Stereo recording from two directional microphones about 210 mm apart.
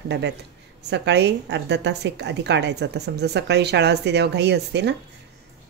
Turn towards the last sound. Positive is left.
turn(degrees=-55)  # may be behind; listen again after turning